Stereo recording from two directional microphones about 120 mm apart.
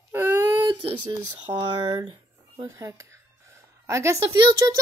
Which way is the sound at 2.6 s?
30° right (ahead or behind).